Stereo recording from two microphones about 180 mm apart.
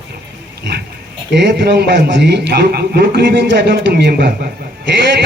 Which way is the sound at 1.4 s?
70° right (ahead or behind).